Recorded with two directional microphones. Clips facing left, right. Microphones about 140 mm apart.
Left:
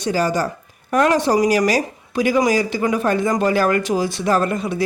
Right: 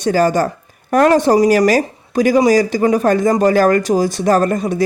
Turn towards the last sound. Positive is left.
turn(degrees=-40)  # may be behind; listen again after turning